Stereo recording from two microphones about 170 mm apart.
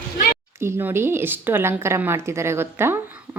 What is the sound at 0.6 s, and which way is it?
Speech, 15° right (ahead or behind).